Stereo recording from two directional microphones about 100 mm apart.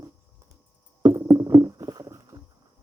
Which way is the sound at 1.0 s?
30° right (ahead or behind).